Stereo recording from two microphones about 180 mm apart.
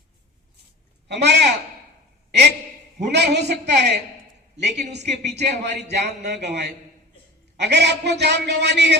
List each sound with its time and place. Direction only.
1.0 s speech: 70° right (ahead or behind)
3.1 s speech: 70° right (ahead or behind)